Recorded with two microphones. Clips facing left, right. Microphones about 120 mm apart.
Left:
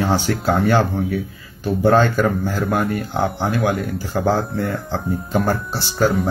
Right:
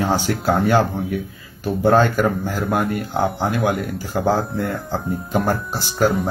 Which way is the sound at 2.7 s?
Centre (ahead or behind).